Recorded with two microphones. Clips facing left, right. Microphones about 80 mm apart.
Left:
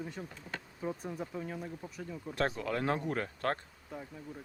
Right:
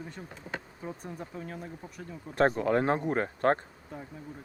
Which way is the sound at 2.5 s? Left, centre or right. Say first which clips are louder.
Right 8 dB; right.